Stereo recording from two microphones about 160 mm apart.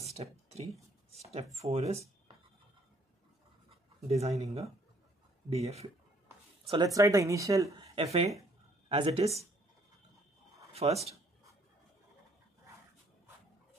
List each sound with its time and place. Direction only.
0.0 s a sound: 40° right (ahead or behind)
1.1 s speech: 45° right (ahead or behind)
4.1 s speech: 40° right (ahead or behind)
6.7 s speech: 25° right (ahead or behind)
7.9 s speech: 40° right (ahead or behind)
10.7 s a sound: 40° right (ahead or behind)